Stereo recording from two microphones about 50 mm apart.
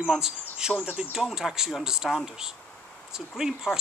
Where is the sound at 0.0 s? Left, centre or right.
Centre.